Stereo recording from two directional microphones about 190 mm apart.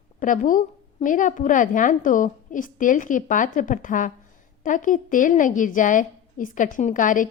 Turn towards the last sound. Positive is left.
turn(degrees=45)  # may be behind; listen again after turning